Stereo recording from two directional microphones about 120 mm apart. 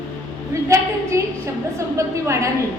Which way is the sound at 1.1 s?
25° right (ahead or behind).